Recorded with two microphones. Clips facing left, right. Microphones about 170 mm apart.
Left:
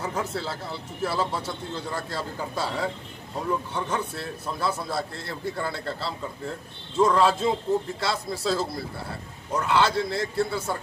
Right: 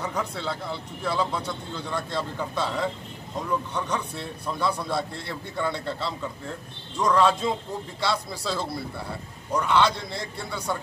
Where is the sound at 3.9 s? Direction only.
5° left (ahead or behind).